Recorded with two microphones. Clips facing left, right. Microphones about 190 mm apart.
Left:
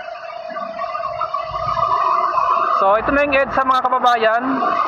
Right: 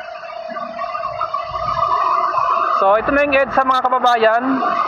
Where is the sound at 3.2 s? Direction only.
5° left (ahead or behind).